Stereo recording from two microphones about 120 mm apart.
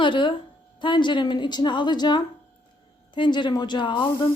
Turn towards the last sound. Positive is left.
turn(degrees=40)  # may be behind; listen again after turning